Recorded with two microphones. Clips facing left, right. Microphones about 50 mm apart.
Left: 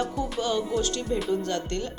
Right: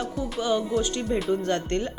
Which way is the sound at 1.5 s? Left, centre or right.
Right.